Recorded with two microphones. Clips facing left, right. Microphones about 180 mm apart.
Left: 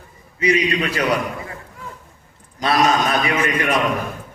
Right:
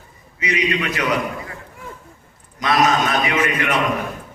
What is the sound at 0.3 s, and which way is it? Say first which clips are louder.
Speech: left 3 dB; 30° left (ahead or behind).